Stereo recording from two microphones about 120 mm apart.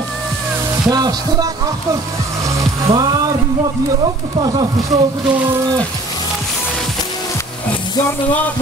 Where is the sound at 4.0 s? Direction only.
40° right (ahead or behind).